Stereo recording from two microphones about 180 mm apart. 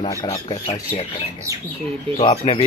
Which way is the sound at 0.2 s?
30° left (ahead or behind).